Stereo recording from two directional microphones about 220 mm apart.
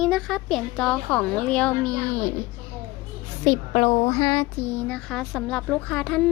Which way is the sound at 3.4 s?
20° left (ahead or behind).